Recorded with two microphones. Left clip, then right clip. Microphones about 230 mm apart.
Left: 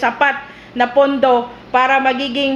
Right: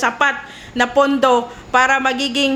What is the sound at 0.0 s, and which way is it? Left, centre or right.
Speech, centre.